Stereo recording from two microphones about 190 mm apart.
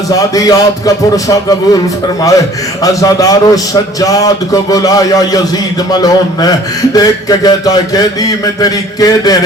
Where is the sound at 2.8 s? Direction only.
20° left (ahead or behind).